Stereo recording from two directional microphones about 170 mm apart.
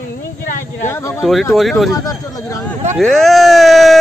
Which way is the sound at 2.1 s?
20° left (ahead or behind).